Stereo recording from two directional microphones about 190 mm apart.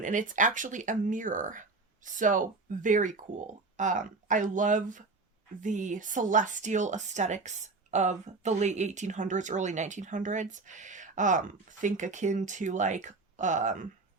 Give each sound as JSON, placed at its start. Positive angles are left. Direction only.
{"t": 0.0, "sound": "a woman's voice", "side_deg": -40}